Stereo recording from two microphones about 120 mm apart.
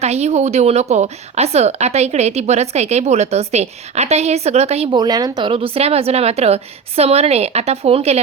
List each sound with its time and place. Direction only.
0.0 s speech: 65° right (ahead or behind)
4.9 s speech: 35° right (ahead or behind); by 8.2 s 60° right (ahead or behind)